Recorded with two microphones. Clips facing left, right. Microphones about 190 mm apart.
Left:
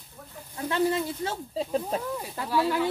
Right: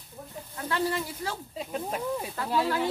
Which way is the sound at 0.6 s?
25° left (ahead or behind).